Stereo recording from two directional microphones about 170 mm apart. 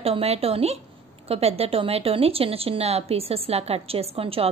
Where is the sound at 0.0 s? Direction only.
35° right (ahead or behind).